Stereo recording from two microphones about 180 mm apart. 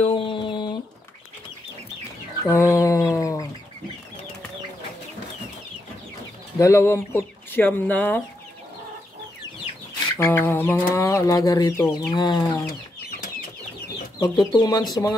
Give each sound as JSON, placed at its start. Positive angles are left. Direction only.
{"t": 0.0, "sound": "a sound", "side_deg": 30}
{"t": 2.4, "sound": "chicken", "side_deg": 15}
{"t": 6.6, "sound": "speech", "side_deg": 15}
{"t": 10.1, "sound": "speech", "side_deg": 15}
{"t": 14.2, "sound": "speech", "side_deg": 25}